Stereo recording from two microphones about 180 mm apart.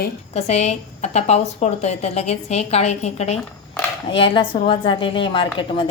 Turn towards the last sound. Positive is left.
turn(degrees=30)  # may be behind; listen again after turning